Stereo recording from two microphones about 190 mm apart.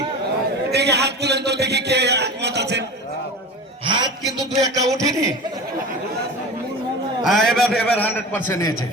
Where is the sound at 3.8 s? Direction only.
25° right (ahead or behind).